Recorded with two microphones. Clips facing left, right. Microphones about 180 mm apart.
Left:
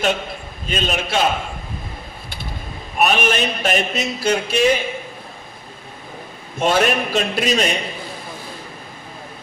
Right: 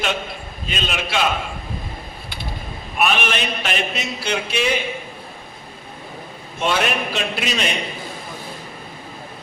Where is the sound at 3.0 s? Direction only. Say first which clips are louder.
Left 3 dB; 40° left (ahead or behind).